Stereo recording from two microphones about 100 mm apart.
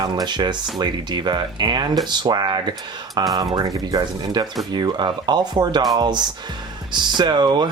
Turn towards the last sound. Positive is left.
turn(degrees=-45)  # may be behind; listen again after turning